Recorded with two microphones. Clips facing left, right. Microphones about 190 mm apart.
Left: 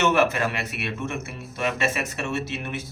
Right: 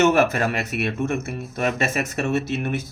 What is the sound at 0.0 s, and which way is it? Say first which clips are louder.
Speech: right 3 dB; 40° right (ahead or behind).